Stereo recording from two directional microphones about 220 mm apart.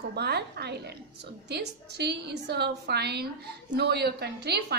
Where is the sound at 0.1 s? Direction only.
50° right (ahead or behind).